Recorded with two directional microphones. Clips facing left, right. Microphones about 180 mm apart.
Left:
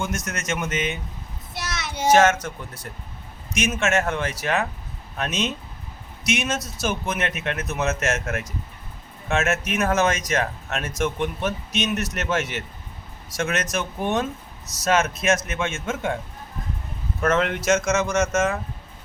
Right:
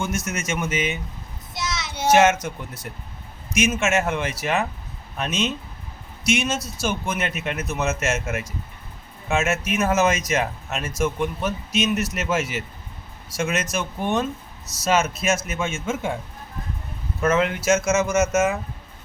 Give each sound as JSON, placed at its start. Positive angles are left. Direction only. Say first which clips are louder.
{"t": 0.3, "sound": "speech", "louder": "right 1 dB", "side_deg": -5}
{"t": 1.5, "sound": "child singing", "louder": "right 2 dB", "side_deg": 60}
{"t": 2.0, "sound": "a man's voice", "louder": "even", "side_deg": -10}
{"t": 17.2, "sound": "speech", "louder": "right 1 dB", "side_deg": 0}